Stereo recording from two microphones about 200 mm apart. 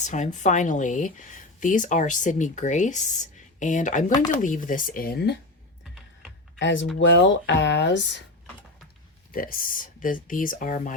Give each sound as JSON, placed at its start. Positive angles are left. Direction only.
{"t": 0.0, "sound": "speech", "side_deg": 35}
{"t": 6.6, "sound": "speech", "side_deg": 65}
{"t": 9.3, "sound": "speech", "side_deg": 45}